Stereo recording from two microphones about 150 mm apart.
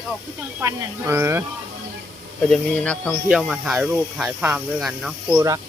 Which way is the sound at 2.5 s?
10° left (ahead or behind).